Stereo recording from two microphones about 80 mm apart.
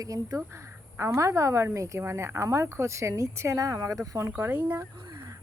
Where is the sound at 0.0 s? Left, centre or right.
Right.